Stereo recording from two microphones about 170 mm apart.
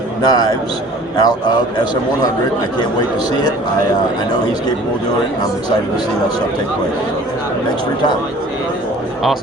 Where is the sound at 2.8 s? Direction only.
25° left (ahead or behind).